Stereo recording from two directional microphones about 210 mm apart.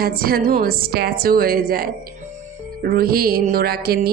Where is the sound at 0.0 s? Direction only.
45° right (ahead or behind).